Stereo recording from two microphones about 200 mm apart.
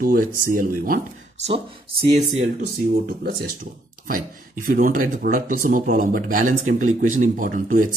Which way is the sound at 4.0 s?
45° right (ahead or behind).